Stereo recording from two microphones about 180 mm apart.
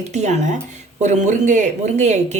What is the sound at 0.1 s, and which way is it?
Speech, 40° right (ahead or behind).